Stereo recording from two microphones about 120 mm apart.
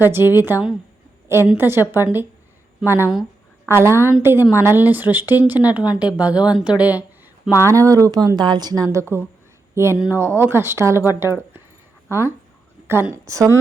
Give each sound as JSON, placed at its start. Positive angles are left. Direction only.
{"t": 0.0, "sound": "speech", "side_deg": -15}
{"t": 7.6, "sound": "speech", "side_deg": -25}